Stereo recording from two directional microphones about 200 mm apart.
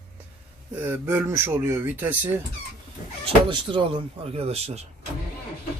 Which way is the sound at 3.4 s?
25° right (ahead or behind).